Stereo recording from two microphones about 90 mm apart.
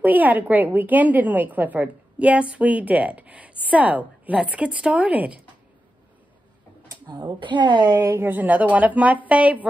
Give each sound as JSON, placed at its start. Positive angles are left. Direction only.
{"t": 0.0, "sound": "a woman's voice", "side_deg": -20}
{"t": 7.1, "sound": "a woman's voice", "side_deg": -55}
{"t": 7.9, "sound": "a woman's voice", "side_deg": -35}